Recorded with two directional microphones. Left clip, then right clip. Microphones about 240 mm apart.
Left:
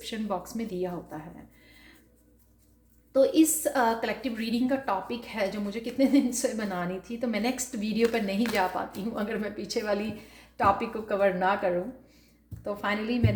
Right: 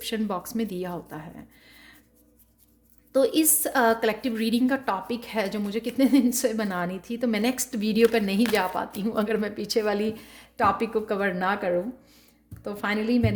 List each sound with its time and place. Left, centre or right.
0.0 s a woman's voice: right
3.1 s a woman's voice: right